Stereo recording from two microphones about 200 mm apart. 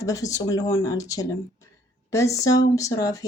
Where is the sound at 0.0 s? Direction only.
15° left (ahead or behind).